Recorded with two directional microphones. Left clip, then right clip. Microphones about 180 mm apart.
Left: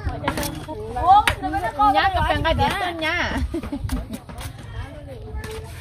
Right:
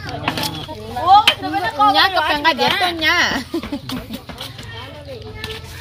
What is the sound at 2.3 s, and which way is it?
A woman's voice, 35° right (ahead or behind).